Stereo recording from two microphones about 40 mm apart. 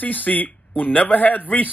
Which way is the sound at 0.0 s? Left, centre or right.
Left.